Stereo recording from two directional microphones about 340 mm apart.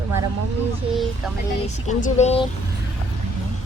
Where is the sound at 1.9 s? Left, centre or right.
Left.